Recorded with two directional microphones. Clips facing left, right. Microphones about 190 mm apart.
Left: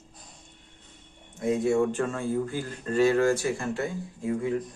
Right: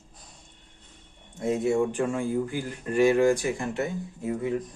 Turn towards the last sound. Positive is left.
turn(degrees=-20)  # may be behind; listen again after turning